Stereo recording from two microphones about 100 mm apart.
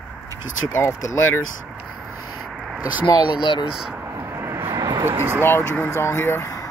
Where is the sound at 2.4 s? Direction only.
5° right (ahead or behind).